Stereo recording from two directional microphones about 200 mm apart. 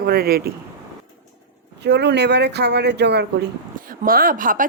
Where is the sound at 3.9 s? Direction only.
45° right (ahead or behind).